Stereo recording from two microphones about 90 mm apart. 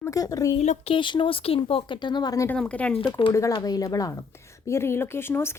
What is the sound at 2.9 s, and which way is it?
Speech, 75° left (ahead or behind).